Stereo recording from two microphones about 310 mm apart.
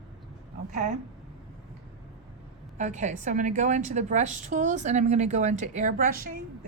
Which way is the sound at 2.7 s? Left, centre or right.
Right.